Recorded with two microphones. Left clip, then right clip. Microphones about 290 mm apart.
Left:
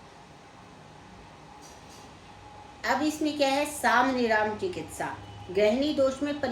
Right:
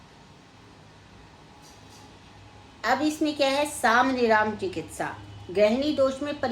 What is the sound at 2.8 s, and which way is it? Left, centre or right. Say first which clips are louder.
A woman's voice: right 3 dB; centre.